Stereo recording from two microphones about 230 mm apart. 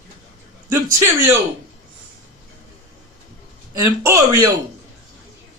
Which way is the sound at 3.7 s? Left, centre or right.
Centre.